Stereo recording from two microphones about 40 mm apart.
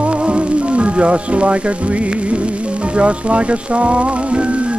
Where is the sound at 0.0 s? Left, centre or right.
Right.